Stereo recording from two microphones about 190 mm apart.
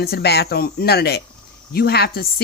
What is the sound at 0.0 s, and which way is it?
A woman's voice, 55° left (ahead or behind).